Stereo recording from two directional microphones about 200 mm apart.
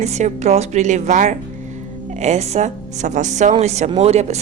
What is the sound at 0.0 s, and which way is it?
Speech, 35° right (ahead or behind).